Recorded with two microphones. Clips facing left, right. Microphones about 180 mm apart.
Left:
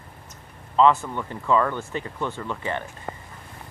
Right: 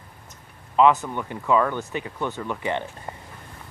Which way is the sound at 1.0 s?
10° right (ahead or behind).